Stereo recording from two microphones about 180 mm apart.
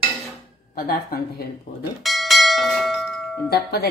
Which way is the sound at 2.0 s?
Centre (ahead or behind).